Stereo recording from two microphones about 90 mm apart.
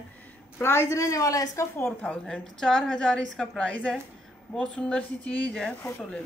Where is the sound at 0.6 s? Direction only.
30° left (ahead or behind).